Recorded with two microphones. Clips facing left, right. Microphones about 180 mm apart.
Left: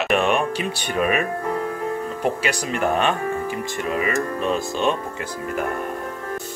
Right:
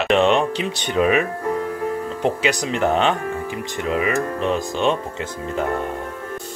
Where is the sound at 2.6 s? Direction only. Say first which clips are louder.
Right 1 dB; 20° right (ahead or behind).